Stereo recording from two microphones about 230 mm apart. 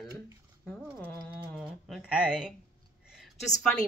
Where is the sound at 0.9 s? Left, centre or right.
Centre.